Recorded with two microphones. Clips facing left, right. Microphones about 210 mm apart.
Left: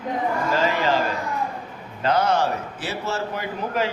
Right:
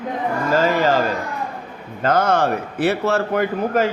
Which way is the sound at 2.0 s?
50° right (ahead or behind).